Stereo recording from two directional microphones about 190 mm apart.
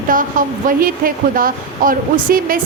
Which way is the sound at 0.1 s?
45° right (ahead or behind).